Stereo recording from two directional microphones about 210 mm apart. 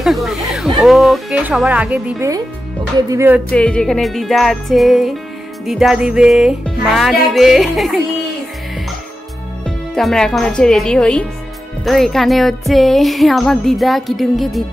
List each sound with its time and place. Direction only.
0.0 s a sound: centre (ahead or behind)
0.7 s speech: centre (ahead or behind)
3.1 s music: 10° right (ahead or behind)
3.4 s speech: 5° left (ahead or behind)
9.9 s speech: centre (ahead or behind)